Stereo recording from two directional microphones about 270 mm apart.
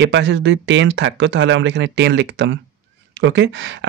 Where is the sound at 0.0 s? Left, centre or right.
Right.